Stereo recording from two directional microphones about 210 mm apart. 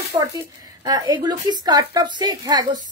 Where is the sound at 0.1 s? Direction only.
15° right (ahead or behind).